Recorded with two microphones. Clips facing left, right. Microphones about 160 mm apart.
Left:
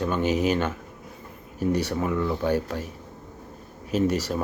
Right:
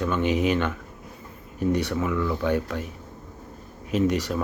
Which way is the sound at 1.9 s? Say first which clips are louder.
Even; 35° left (ahead or behind).